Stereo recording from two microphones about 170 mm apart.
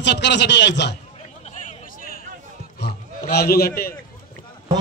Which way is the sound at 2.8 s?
70° left (ahead or behind).